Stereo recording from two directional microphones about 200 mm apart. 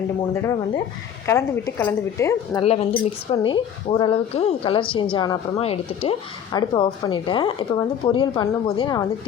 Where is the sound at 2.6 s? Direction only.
30° left (ahead or behind).